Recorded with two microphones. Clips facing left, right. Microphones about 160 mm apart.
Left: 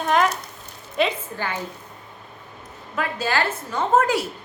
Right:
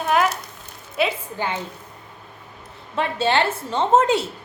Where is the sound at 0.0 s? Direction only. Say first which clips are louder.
Even; 5° right (ahead or behind).